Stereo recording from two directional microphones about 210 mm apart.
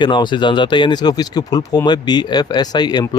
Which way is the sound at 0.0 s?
20° left (ahead or behind).